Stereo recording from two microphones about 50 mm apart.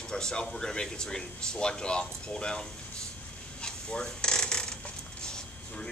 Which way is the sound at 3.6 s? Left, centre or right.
Centre.